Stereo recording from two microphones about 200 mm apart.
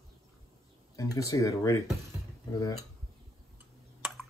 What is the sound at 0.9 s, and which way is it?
Speech, 15° left (ahead or behind).